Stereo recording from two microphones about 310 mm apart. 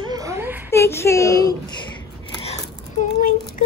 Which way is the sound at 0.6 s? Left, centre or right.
Centre.